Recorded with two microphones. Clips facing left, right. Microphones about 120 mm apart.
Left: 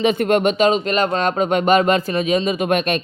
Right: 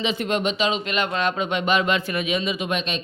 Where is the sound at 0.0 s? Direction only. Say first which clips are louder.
Left 8 dB; 50° left (ahead or behind).